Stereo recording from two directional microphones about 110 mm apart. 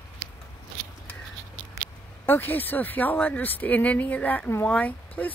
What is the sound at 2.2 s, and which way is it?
Speech, 15° left (ahead or behind).